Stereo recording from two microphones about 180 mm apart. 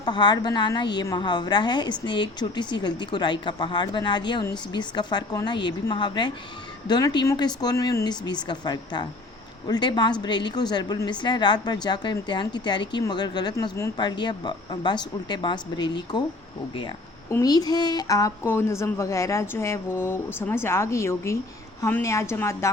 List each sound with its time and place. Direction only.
0.0 s a woman's voice: 25° left (ahead or behind)